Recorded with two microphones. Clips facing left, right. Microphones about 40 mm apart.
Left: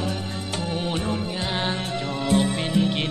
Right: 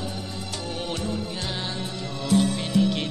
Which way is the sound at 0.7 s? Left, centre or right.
Left.